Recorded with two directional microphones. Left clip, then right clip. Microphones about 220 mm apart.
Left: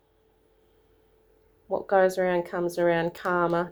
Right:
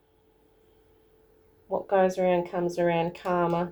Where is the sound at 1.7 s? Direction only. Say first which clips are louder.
Left 2 dB; 45° left (ahead or behind).